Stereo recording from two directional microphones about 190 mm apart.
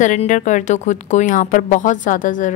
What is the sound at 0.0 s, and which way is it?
A woman's voice, 40° left (ahead or behind).